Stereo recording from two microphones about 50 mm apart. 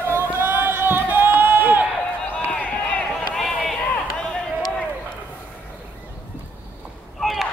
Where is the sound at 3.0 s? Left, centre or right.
Centre.